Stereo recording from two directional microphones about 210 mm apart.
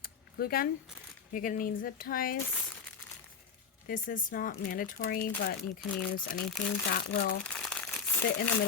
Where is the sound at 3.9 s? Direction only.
40° left (ahead or behind).